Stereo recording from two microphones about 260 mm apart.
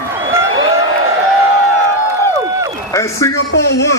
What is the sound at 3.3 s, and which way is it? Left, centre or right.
Speech, left.